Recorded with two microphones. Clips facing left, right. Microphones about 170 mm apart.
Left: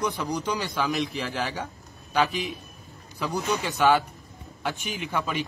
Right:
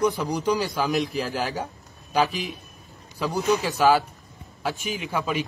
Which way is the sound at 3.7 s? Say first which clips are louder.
Even; centre (ahead or behind).